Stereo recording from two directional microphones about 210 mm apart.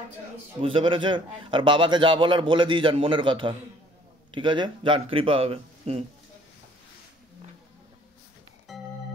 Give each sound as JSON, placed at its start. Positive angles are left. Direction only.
{"t": 0.6, "sound": "a man's voice", "side_deg": -25}
{"t": 8.7, "sound": "organ", "side_deg": 0}